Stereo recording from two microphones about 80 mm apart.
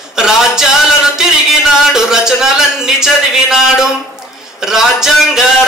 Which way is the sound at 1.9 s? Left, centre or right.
Centre.